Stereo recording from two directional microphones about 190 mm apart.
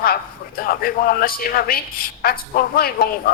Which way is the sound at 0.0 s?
50° left (ahead or behind).